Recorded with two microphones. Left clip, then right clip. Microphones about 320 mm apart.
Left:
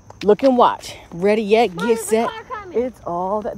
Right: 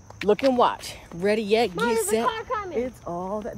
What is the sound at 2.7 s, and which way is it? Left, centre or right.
Speech, left.